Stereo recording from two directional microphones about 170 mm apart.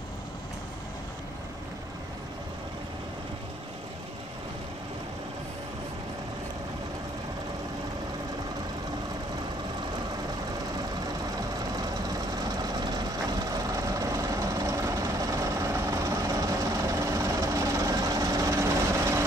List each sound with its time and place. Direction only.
11.3 s vehicle: 25° right (ahead or behind)